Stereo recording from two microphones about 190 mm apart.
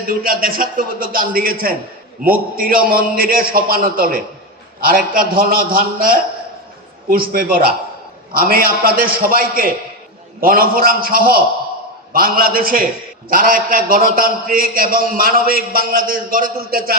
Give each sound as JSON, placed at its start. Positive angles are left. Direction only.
{"t": 0.0, "sound": "a man's voice", "side_deg": -50}